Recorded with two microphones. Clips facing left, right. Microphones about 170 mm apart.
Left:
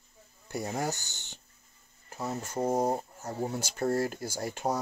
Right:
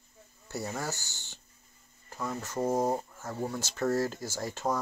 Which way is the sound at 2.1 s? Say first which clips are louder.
Left 1 dB; 35° left (ahead or behind).